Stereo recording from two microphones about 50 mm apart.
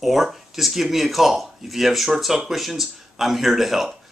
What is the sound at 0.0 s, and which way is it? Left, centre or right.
Speech, centre.